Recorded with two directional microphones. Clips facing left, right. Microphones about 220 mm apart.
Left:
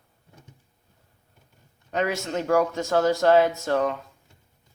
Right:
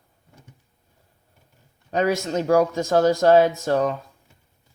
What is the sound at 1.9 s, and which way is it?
Speech, 35° right (ahead or behind).